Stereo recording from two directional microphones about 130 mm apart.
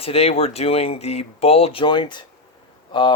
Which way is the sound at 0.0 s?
50° left (ahead or behind).